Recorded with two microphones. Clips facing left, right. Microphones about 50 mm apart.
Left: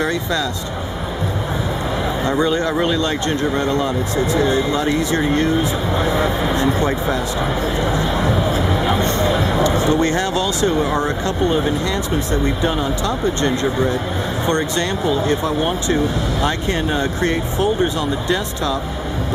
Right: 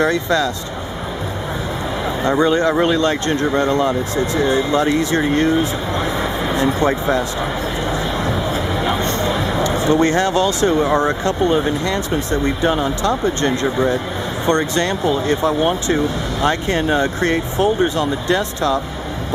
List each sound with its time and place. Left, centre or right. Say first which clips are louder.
0.0 s speech: right 4 dB; right
2.4 s speech: right 4 dB; right
4.4 s speech: right 1 dB; centre
5.9 s speech: left 3 dB; centre
7.9 s music: left 2 dB; centre
9.2 s a sound: left 2 dB; centre
9.9 s speech: right 3 dB; right
12.6 s speech: right 2 dB; right
16.4 s speech: right 5 dB; right